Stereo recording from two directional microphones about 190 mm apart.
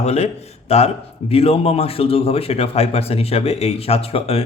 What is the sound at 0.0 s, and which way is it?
A man's voice, 35° left (ahead or behind).